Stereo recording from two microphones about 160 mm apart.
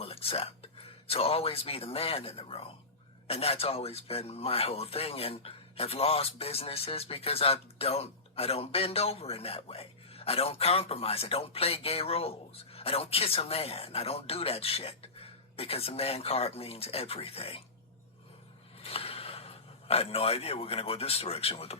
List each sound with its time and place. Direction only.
0.0 s speech: 35° left (ahead or behind)
18.8 s speech: 40° left (ahead or behind)